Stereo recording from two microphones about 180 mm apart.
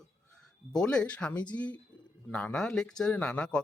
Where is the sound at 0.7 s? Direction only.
5° left (ahead or behind).